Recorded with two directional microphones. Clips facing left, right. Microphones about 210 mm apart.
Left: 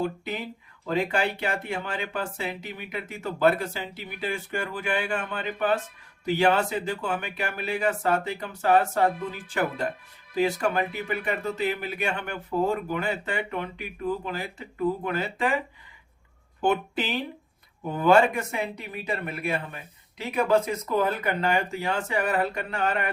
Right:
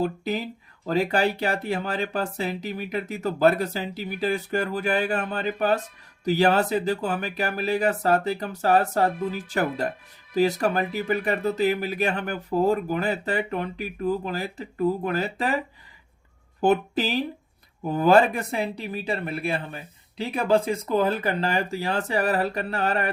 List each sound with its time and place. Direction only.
0.0 s speech: 40° right (ahead or behind)
16.6 s speech: 40° right (ahead or behind)